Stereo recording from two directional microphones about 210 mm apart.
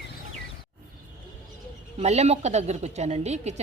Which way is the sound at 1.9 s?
30° right (ahead or behind).